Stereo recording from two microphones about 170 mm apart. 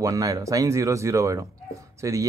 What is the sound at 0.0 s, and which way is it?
Speech, 20° right (ahead or behind).